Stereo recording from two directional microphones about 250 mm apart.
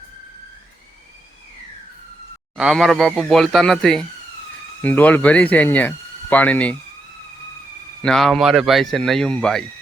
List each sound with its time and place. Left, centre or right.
2.6 s speech: centre
8.0 s speech: centre